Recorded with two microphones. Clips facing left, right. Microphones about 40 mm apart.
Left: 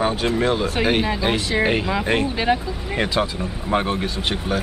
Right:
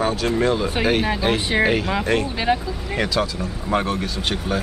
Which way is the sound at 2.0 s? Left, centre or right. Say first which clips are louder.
Even; left.